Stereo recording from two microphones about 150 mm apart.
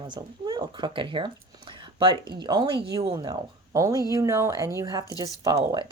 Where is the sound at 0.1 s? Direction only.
30° right (ahead or behind).